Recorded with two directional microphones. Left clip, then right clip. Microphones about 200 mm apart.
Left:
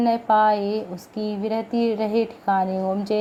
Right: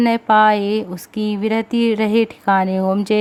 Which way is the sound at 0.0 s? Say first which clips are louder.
Right 5 dB; 35° right (ahead or behind).